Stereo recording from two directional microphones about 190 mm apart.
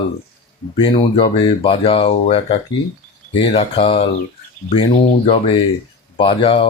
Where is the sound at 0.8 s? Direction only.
30° left (ahead or behind).